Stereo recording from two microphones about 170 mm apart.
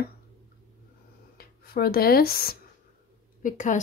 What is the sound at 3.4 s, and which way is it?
Speech, 50° left (ahead or behind).